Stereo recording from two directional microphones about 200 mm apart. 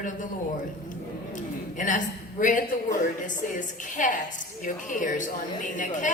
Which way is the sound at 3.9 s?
40° left (ahead or behind).